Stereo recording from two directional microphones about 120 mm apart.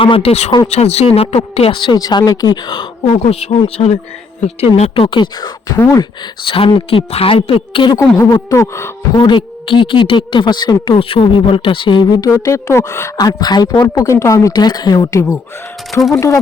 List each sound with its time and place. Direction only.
0.0 s speech: 50° left (ahead or behind)
3.1 s speech: 55° left (ahead or behind)
8.2 s a woman's voice: 25° left (ahead or behind)
9.1 s speech: 40° left (ahead or behind); by 13.1 s 20° left (ahead or behind)
13.1 s a woman's voice: 35° left (ahead or behind)